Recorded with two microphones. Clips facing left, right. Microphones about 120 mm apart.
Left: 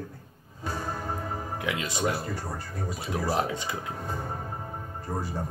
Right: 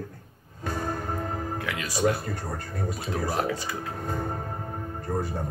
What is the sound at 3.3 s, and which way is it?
Speech, 20° left (ahead or behind).